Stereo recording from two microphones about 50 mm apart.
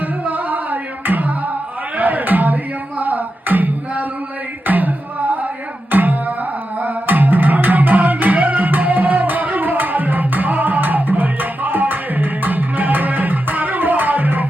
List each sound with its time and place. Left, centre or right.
0.3 s music: right
2.0 s a sound: right
3.0 s music: right
5.9 s music: right